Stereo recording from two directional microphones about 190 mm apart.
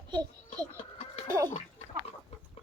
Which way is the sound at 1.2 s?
15° right (ahead or behind).